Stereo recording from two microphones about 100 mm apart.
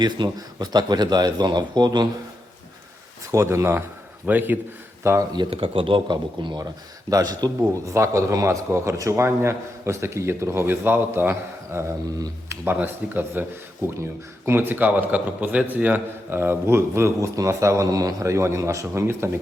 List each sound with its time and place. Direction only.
0.0 s speech: 45° right (ahead or behind)
3.3 s a man's voice: 25° right (ahead or behind)
5.5 s speech: 65° right (ahead or behind); by 6.7 s 50° right (ahead or behind)
7.1 s a man's voice: 40° right (ahead or behind); by 13.4 s 20° right (ahead or behind)
14.4 s a man's voice: 20° right (ahead or behind)